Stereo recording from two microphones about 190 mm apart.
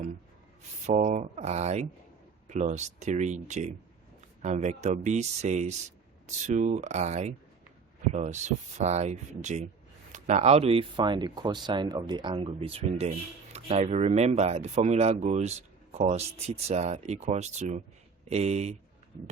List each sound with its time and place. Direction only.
0.9 s speech: 40° right (ahead or behind)